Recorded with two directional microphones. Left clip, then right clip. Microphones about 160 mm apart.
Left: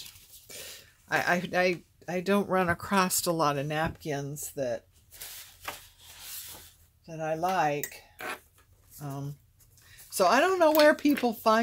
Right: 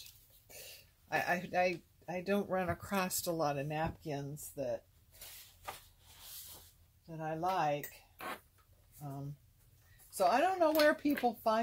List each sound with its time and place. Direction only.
0.5 s speech: 45° left (ahead or behind); by 4.7 s 60° left (ahead or behind)
7.2 s speech: 65° left (ahead or behind)
10.1 s speech: 75° left (ahead or behind)